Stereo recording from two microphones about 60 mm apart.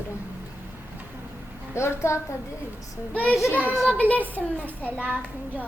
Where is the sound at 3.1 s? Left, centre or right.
Left.